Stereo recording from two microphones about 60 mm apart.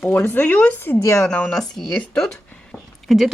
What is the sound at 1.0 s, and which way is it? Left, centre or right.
Speech, left.